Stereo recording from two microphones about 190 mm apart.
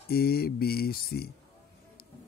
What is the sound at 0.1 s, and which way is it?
Speech, 55° left (ahead or behind).